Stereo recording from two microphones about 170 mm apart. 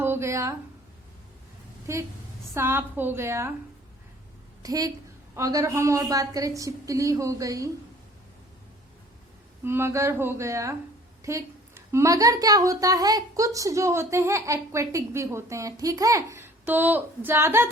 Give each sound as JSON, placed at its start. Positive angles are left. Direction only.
{"t": 0.0, "sound": "speech", "side_deg": -15}
{"t": 1.9, "sound": "a woman's voice", "side_deg": -15}
{"t": 4.6, "sound": "a woman's voice", "side_deg": -20}
{"t": 9.6, "sound": "a woman's voice", "side_deg": -15}